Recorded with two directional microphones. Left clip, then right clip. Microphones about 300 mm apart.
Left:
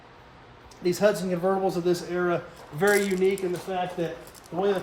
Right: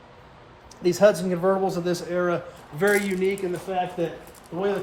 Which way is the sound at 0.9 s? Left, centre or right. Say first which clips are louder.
Right 5 dB; centre.